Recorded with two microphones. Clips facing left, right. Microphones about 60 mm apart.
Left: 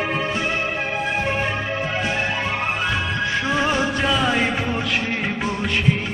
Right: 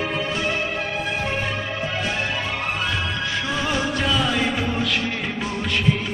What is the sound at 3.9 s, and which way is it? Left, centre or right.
Music, centre.